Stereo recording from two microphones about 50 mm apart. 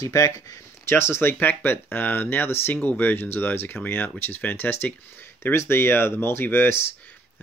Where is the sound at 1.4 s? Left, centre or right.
Left.